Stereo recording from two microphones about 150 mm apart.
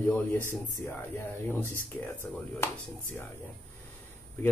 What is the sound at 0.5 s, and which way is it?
Speech, 15° left (ahead or behind).